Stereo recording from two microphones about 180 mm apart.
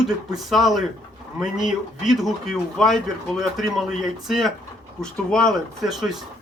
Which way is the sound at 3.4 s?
Centre (ahead or behind).